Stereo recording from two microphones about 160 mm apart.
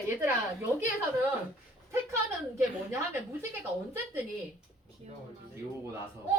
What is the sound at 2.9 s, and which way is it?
A woman's voice, 15° right (ahead or behind).